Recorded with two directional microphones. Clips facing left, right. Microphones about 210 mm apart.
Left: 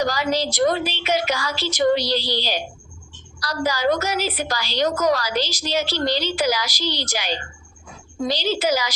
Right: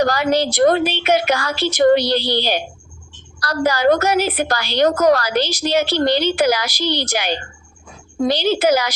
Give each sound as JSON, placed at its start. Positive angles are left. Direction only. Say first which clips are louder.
{"t": 0.0, "sound": "a woman's voice", "louder": "right 5 dB", "side_deg": -60}